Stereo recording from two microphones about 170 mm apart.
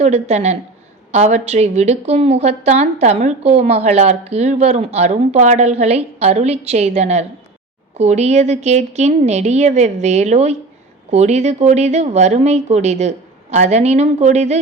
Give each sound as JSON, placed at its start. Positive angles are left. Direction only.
{"t": 0.0, "sound": "a woman's voice", "side_deg": -40}